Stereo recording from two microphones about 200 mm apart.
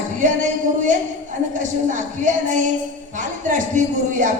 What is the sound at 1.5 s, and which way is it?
Speech, 40° right (ahead or behind).